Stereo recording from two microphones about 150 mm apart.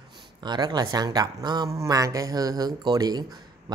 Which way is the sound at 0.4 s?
30° right (ahead or behind).